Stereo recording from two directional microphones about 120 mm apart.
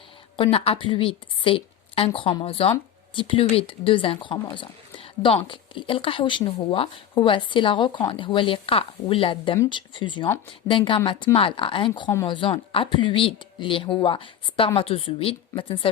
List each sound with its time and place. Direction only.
0.3 s a woman's voice: 55° left (ahead or behind)